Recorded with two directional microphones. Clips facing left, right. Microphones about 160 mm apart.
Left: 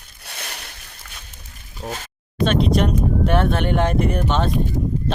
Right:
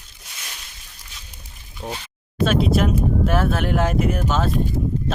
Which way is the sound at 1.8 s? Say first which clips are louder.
Even; 35° left (ahead or behind).